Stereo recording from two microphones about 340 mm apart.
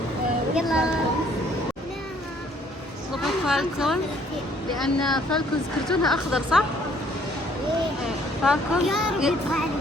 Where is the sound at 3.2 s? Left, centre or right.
Centre.